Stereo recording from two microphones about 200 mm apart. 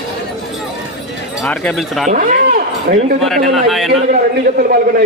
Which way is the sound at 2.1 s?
45° right (ahead or behind).